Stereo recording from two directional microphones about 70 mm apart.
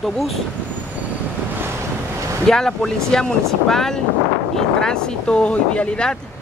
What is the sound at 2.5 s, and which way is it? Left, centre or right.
Speech, centre.